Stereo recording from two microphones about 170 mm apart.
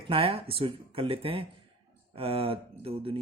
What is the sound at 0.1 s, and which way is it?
Speech, 30° right (ahead or behind).